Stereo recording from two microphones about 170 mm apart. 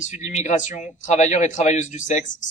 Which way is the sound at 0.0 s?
45° left (ahead or behind).